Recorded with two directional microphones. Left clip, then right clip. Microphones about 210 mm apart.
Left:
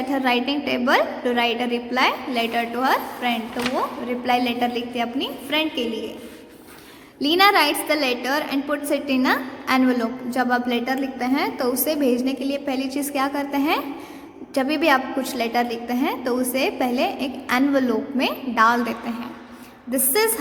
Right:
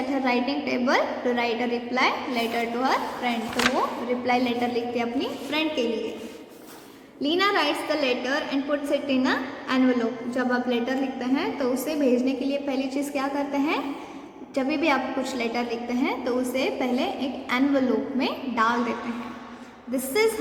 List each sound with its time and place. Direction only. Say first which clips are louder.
0.3 s a woman's voice: left 5 dB; 30° left (ahead or behind)
7.2 s a woman's voice: left 7 dB; 45° left (ahead or behind)